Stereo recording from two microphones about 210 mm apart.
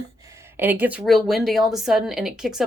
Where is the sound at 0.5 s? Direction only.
10° right (ahead or behind).